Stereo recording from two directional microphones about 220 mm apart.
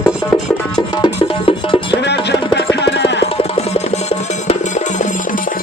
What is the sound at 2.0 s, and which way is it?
Music, 50° left (ahead or behind).